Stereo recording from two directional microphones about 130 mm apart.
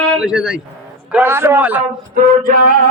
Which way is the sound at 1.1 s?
15° right (ahead or behind).